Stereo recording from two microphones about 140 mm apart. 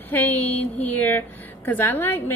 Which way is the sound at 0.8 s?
10° left (ahead or behind).